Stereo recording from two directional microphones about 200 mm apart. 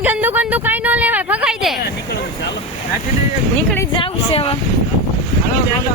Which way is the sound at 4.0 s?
30° left (ahead or behind).